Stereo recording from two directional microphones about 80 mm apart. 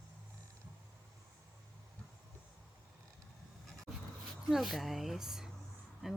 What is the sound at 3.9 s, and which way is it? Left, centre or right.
Dog, left.